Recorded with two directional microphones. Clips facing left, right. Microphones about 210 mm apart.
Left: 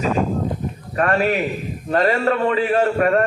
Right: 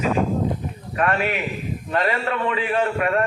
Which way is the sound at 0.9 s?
40° left (ahead or behind).